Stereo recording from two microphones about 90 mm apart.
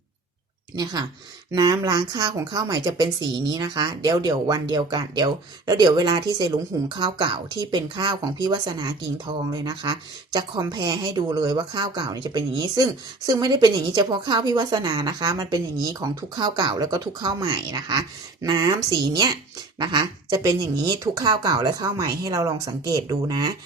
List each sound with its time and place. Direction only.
1.5 s speech: 40° right (ahead or behind)
16.3 s speech: 55° right (ahead or behind)